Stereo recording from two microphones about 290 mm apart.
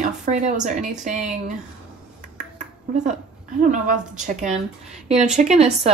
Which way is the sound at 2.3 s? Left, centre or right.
Right.